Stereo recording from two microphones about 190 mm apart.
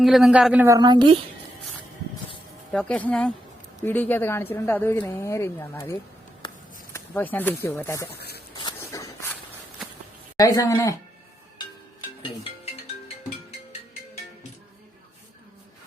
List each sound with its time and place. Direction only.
0.0 s speech: centre (ahead or behind)
0.8 s a woman's voice: 25° right (ahead or behind)
2.7 s speech: 5° left (ahead or behind)
8.1 s a sound: 55° left (ahead or behind)
8.5 s walk: 20° left (ahead or behind)
10.3 s speech: 20° left (ahead or behind)